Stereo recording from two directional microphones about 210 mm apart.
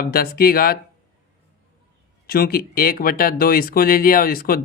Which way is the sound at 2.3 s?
45° left (ahead or behind).